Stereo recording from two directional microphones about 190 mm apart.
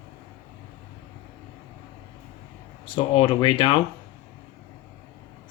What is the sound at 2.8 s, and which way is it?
Speech, 30° left (ahead or behind).